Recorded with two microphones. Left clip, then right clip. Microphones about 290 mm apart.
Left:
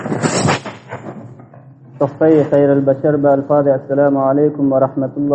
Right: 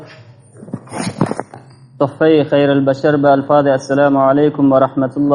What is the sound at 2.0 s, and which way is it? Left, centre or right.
A man's voice, right.